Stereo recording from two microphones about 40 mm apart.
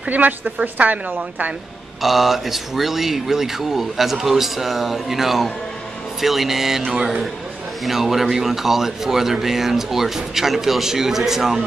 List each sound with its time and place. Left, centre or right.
0.1 s a woman's voice: right
2.0 s speech: centre